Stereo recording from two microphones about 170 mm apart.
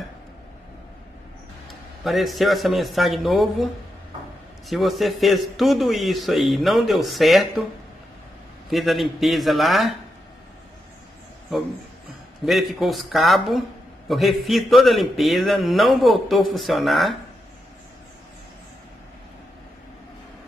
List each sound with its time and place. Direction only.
1.7 s a man's voice: centre (ahead or behind)
4.6 s a man's voice: centre (ahead or behind)
8.6 s a man's voice: centre (ahead or behind)
12.4 s a man's voice: centre (ahead or behind)